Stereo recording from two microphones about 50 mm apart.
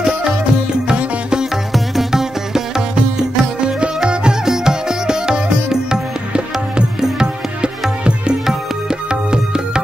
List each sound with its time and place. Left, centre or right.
0.8 s music: centre